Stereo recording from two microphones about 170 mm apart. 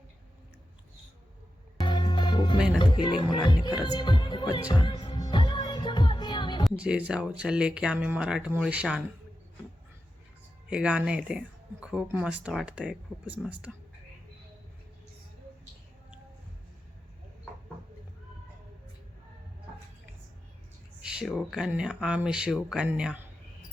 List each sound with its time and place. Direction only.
1.8 s music: 25° left (ahead or behind)
2.7 s speech: 25° left (ahead or behind)
3.9 s music: 25° left (ahead or behind)
6.7 s speech: 5° right (ahead or behind)
10.7 s speech: 5° right (ahead or behind)
21.0 s speech: 5° right (ahead or behind)